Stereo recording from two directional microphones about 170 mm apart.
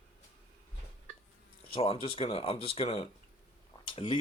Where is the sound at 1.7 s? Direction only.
35° left (ahead or behind).